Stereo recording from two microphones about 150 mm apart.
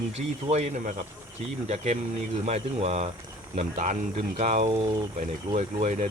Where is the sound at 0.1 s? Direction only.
45° right (ahead or behind).